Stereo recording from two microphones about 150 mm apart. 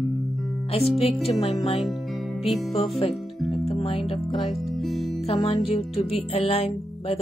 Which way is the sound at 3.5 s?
40° left (ahead or behind).